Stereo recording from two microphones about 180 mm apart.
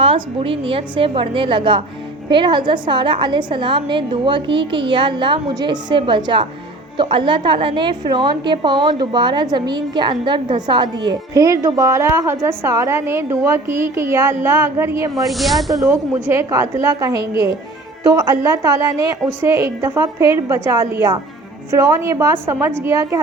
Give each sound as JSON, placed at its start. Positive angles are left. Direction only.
{"t": 0.0, "sound": "a woman's voice", "side_deg": -30}
{"t": 15.1, "sound": "speech", "side_deg": 0}
{"t": 16.3, "sound": "a woman's voice", "side_deg": -15}